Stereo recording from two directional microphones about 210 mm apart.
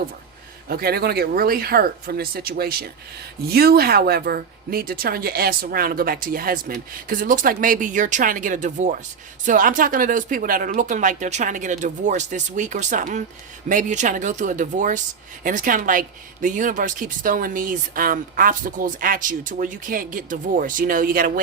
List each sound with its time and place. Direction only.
0.7 s speech: 45° right (ahead or behind)